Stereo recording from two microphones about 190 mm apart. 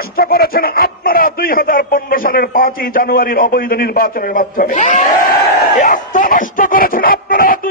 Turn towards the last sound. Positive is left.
turn(degrees=50)  # may be behind; listen again after turning